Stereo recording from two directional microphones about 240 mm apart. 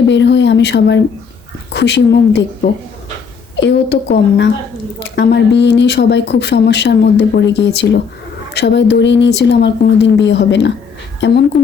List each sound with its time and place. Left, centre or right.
0.1 s speech: left
3.5 s speech: left